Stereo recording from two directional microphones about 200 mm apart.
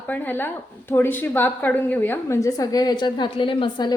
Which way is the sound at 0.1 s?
10° left (ahead or behind).